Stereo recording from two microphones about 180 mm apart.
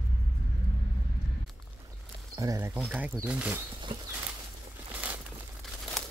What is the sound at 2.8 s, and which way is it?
Speech, 5° right (ahead or behind).